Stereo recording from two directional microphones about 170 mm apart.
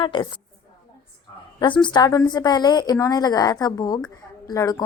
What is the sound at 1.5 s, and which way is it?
A woman's voice, 25° left (ahead or behind).